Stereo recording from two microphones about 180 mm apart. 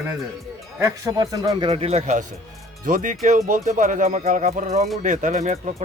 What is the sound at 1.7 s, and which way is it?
Speech, 35° right (ahead or behind).